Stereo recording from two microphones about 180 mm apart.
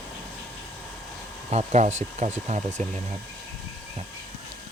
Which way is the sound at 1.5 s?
40° right (ahead or behind).